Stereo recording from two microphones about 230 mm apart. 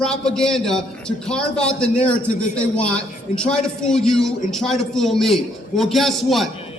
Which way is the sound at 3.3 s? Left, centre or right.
Centre.